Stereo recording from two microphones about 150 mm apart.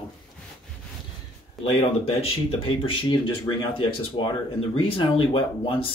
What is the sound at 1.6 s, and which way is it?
Speech, 40° left (ahead or behind).